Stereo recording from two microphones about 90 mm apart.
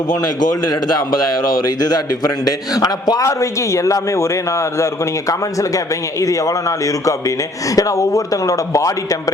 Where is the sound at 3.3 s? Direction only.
35° left (ahead or behind).